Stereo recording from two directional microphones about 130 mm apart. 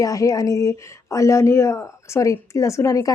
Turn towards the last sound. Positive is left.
turn(degrees=25)  # may be behind; listen again after turning